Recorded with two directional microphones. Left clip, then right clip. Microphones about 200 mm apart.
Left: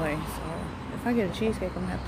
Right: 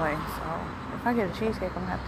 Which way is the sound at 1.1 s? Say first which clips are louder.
Right 1 dB; 25° left (ahead or behind).